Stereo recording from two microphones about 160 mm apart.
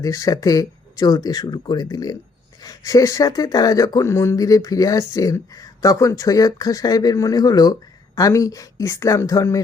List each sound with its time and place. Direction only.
0.0 s speech: 20° left (ahead or behind)